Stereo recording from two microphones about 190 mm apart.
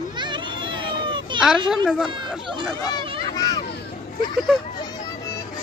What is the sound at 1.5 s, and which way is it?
Speech, centre (ahead or behind).